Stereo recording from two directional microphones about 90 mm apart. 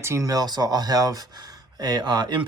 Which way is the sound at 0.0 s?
30° right (ahead or behind).